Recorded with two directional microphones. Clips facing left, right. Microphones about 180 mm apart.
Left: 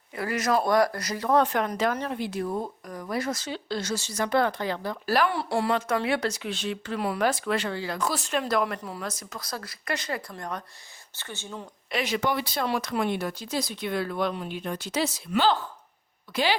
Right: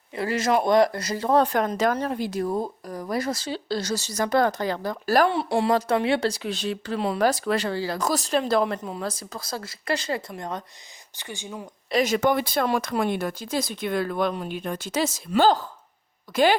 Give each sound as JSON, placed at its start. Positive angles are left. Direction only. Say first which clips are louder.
{"t": 0.1, "sound": "speech", "louder": "right 3 dB", "side_deg": -25}
{"t": 5.3, "sound": "speech", "louder": "right 4 dB", "side_deg": -25}
{"t": 7.2, "sound": "speech", "louder": "right 4 dB", "side_deg": -40}
{"t": 11.9, "sound": "speech", "louder": "right 6 dB", "side_deg": -40}